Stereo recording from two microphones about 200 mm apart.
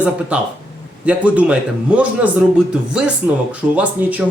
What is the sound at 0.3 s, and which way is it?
Speech, 5° right (ahead or behind).